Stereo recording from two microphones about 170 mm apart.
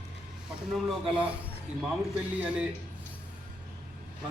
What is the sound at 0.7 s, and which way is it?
A man's voice, 5° right (ahead or behind).